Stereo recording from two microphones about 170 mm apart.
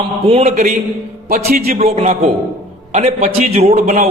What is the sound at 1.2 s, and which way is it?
Speech, 60° right (ahead or behind).